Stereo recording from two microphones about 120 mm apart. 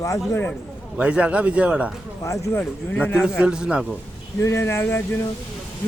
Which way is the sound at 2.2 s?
25° left (ahead or behind).